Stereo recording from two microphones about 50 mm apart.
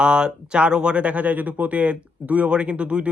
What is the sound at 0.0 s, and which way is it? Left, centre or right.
Speech, centre.